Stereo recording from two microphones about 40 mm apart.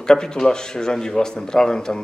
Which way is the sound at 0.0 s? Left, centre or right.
Centre.